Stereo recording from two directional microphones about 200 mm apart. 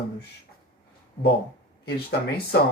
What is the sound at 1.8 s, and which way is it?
Speech, 55° left (ahead or behind).